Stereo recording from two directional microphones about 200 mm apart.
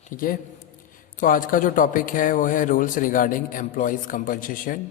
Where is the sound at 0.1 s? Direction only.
40° left (ahead or behind).